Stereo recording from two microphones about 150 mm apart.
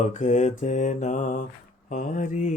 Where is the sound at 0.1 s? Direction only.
55° left (ahead or behind).